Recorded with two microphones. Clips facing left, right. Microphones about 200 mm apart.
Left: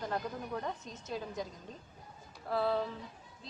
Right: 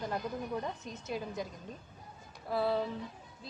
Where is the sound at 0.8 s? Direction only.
10° right (ahead or behind).